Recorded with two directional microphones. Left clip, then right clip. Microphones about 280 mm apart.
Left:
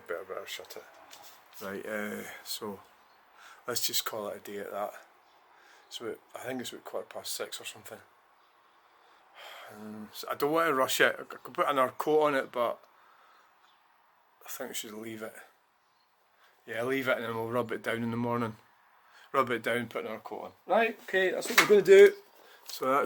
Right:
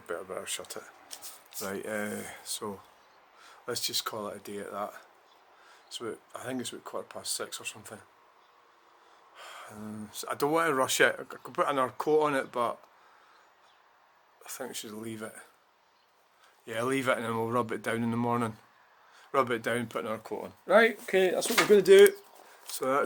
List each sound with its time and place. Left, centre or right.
0.1 s speech: centre
1.5 s speech: centre
9.3 s speech: centre
14.4 s speech: centre
16.6 s speech: centre